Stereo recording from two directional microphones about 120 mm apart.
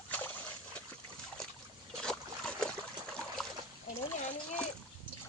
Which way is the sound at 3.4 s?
5° left (ahead or behind).